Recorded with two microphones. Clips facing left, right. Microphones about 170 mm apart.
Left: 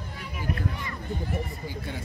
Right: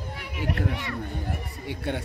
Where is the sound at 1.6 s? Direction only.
70° right (ahead or behind).